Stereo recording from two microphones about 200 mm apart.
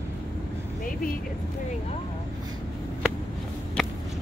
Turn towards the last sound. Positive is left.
turn(degrees=5)  # may be behind; listen again after turning